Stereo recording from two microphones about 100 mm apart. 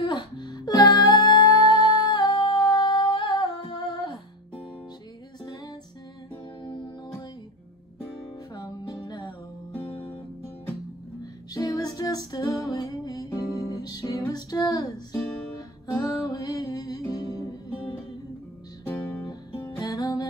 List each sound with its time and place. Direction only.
0.1 s music: 45° left (ahead or behind)
8.5 s music: 40° left (ahead or behind)
11.5 s music: 35° left (ahead or behind)
19.8 s music: 35° left (ahead or behind)